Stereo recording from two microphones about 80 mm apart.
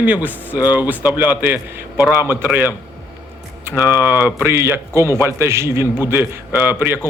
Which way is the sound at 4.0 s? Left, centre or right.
Right.